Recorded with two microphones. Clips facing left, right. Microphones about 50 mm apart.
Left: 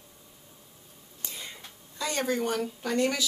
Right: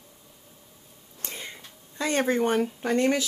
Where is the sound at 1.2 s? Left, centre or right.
Right.